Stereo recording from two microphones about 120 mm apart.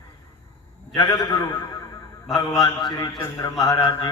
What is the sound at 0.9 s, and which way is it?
Speech, 30° left (ahead or behind).